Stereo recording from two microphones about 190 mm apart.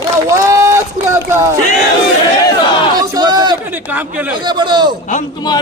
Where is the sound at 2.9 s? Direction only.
20° right (ahead or behind).